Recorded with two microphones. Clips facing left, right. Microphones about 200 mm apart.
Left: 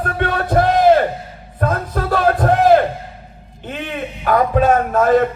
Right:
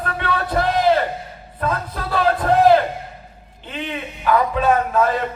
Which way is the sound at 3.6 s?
50° left (ahead or behind).